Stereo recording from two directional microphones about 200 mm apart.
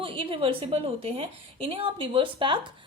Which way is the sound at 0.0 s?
25° right (ahead or behind).